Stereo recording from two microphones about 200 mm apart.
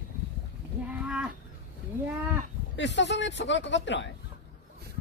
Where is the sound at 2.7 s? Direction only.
65° left (ahead or behind).